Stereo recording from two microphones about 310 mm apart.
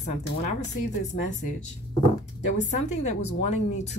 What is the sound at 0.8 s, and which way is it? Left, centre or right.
Speech, left.